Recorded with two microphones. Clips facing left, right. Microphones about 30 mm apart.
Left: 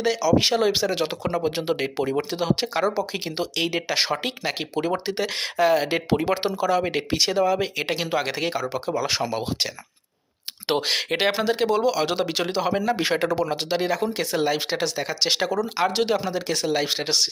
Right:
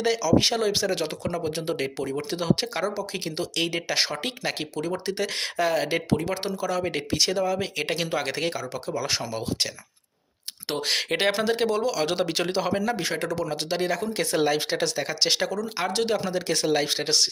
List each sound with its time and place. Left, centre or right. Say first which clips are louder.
0.0 s speech: left 1 dB; centre; by 2.2 s left
2.3 s speech: left 2 dB; centre
2.8 s speech: left 4 dB; left
4.7 s speech: left 4 dB; left
6.1 s speech: left 4 dB; left; by 8.5 s centre
8.5 s speech: left 5 dB; left
9.0 s speech: left 3 dB; centre
10.8 s speech: right 2 dB; centre
13.0 s speech: left 5 dB; left
13.7 s speech: left 2 dB; centre